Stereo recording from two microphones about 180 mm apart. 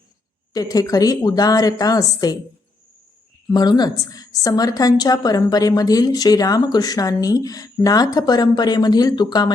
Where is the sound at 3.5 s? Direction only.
25° left (ahead or behind).